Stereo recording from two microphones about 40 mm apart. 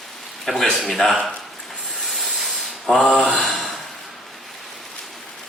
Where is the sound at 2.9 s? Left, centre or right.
Centre.